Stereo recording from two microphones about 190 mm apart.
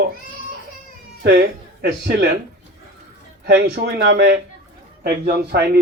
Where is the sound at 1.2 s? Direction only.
60° right (ahead or behind).